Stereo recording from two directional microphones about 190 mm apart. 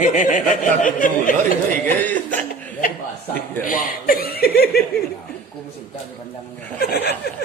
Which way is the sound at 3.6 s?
45° left (ahead or behind).